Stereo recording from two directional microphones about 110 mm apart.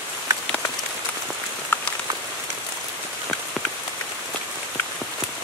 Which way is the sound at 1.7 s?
15° left (ahead or behind).